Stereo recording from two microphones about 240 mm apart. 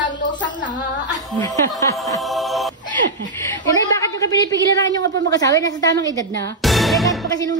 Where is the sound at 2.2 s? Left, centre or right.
Centre.